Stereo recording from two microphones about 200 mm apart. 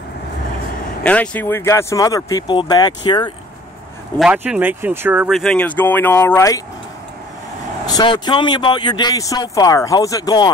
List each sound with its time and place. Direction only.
1.0 s speech: 5° left (ahead or behind)
4.2 s speech: 5° right (ahead or behind); by 6.6 s 15° left (ahead or behind)
7.8 s speech: 20° left (ahead or behind)